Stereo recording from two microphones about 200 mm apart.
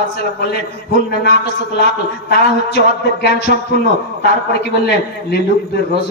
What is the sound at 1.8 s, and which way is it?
A man's voice, 55° left (ahead or behind).